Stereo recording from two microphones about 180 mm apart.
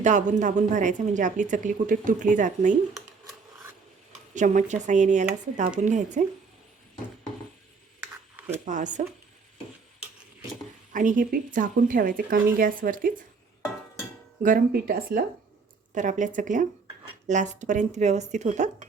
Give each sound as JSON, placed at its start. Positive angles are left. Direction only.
{"t": 0.0, "sound": "a woman's voice", "side_deg": -45}
{"t": 4.4, "sound": "a woman's voice", "side_deg": -45}
{"t": 8.6, "sound": "a woman's voice", "side_deg": -45}
{"t": 10.9, "sound": "a woman's voice", "side_deg": -45}
{"t": 14.4, "sound": "a woman's voice", "side_deg": -50}